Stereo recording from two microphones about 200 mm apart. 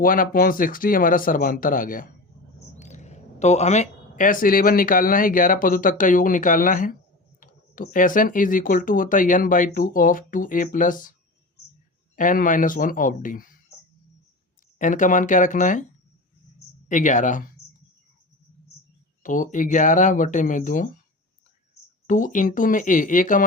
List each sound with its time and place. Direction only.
0.0 s speech: 45° left (ahead or behind)
12.1 s speech: 40° left (ahead or behind)
14.8 s speech: 40° left (ahead or behind)
16.9 s speech: 40° left (ahead or behind)
19.2 s speech: 40° left (ahead or behind)
22.0 s speech: 40° left (ahead or behind)